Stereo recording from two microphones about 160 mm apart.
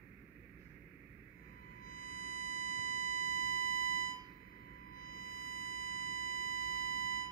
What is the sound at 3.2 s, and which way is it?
Alarm clock, 65° left (ahead or behind).